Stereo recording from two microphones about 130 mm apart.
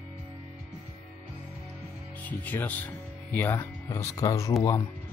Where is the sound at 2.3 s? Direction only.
15° left (ahead or behind).